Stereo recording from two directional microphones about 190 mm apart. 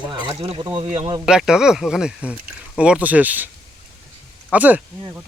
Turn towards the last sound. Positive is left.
turn(degrees=-10)  # may be behind; listen again after turning